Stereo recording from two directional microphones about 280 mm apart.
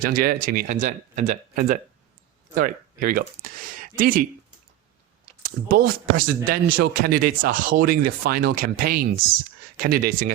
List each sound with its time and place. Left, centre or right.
0.0 s speech: right
5.6 s speech: right